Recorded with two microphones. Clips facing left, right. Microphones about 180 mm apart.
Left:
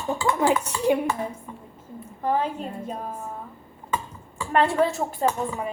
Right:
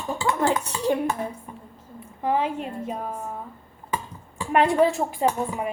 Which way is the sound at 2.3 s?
10° right (ahead or behind).